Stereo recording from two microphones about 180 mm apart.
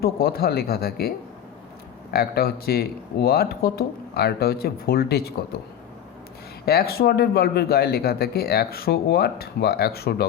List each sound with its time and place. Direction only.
0.0 s speech: 60° left (ahead or behind)
6.7 s speech: 60° left (ahead or behind)